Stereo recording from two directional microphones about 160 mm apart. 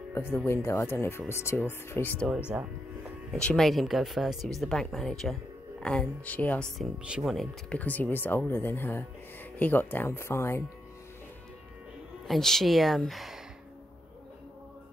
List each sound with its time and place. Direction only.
0.1 s speech: 15° left (ahead or behind)
3.3 s speech: 5° left (ahead or behind)
7.0 s speech: 5° right (ahead or behind); by 10.6 s 15° left (ahead or behind)
12.3 s speech: centre (ahead or behind)